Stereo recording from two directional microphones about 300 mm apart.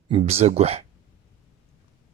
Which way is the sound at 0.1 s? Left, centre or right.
Centre.